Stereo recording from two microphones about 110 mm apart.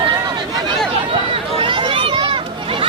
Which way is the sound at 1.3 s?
50° right (ahead or behind).